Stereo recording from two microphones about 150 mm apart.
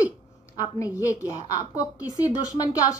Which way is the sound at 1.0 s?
25° left (ahead or behind).